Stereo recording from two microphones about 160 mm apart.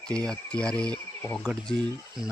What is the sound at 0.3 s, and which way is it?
Speech, 5° left (ahead or behind).